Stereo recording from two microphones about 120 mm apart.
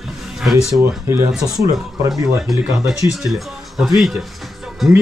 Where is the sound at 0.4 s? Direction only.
5° right (ahead or behind).